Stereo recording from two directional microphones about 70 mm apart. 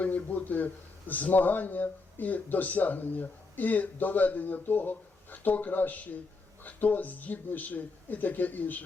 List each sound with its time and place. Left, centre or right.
0.0 s a man's voice: left